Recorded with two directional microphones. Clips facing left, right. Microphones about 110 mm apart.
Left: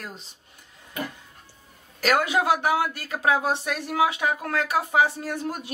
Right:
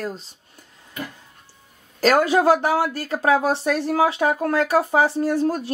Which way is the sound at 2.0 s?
35° right (ahead or behind).